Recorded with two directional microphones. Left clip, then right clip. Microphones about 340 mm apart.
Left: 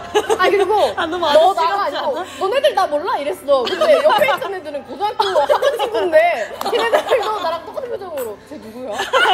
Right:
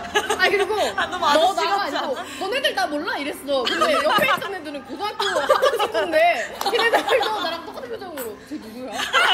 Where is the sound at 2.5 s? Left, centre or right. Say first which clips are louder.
Left 7 dB; left.